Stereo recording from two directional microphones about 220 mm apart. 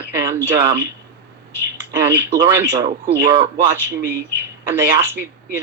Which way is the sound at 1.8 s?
15° right (ahead or behind).